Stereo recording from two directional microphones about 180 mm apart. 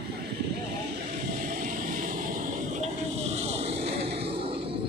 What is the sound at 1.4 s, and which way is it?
Vehicle, 45° right (ahead or behind).